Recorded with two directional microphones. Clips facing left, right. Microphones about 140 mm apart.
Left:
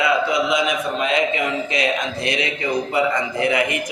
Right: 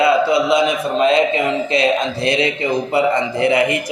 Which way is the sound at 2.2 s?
30° right (ahead or behind).